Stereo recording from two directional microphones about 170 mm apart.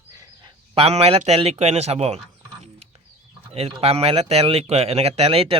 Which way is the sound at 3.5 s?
35° right (ahead or behind).